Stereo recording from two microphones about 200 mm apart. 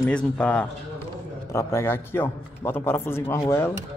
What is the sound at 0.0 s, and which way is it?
A man's voice, 5° left (ahead or behind).